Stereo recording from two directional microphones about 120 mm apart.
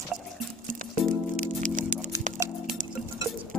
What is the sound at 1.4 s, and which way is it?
Music, 90° right.